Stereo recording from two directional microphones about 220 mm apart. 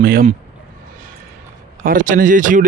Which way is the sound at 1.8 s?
40° right (ahead or behind).